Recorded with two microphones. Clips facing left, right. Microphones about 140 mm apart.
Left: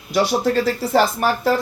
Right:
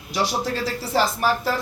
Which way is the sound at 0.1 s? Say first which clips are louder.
Left 6 dB; 55° left (ahead or behind).